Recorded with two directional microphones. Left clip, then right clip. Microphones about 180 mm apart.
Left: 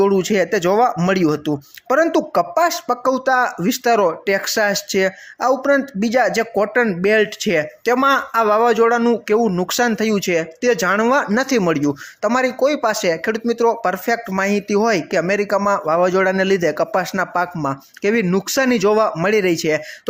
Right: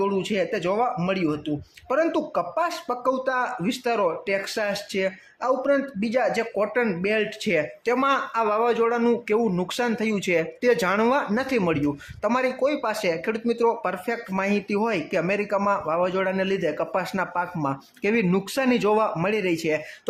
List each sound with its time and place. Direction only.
0.0 s speech: 35° left (ahead or behind)